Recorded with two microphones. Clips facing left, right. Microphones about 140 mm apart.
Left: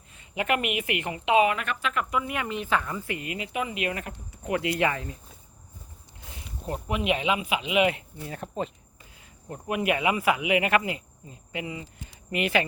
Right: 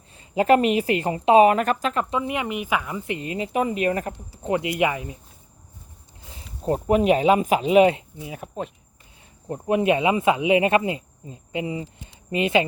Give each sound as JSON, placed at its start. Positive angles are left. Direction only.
{"t": 0.1, "sound": "a woman's voice", "side_deg": -35}
{"t": 4.8, "sound": "speech", "side_deg": -15}
{"t": 6.7, "sound": "a woman's voice", "side_deg": -35}
{"t": 8.2, "sound": "speech", "side_deg": -10}
{"t": 9.5, "sound": "speech", "side_deg": -25}